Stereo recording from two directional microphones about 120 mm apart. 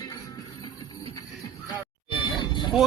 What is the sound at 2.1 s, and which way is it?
Music, 40° left (ahead or behind).